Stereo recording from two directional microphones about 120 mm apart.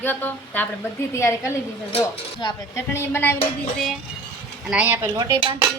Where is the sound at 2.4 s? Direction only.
40° left (ahead or behind).